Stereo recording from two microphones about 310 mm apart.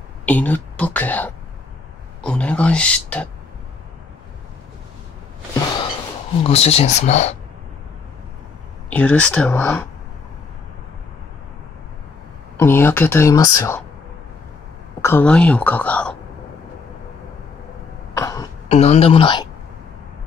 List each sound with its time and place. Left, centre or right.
0.2 s a woman's voice: centre
6.4 s speech: centre
8.9 s a woman's voice: centre
12.5 s speech: centre
15.0 s a woman's voice: centre
18.1 s throat clearing: centre